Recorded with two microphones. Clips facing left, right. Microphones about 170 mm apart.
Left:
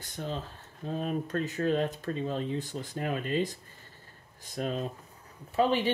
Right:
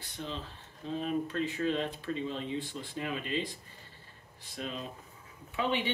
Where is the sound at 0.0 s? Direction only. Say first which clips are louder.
Left 4 dB; 45° left (ahead or behind).